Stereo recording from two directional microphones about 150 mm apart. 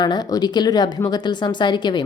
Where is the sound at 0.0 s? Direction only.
30° left (ahead or behind).